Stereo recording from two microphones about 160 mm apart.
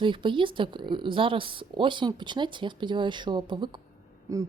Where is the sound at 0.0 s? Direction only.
30° right (ahead or behind).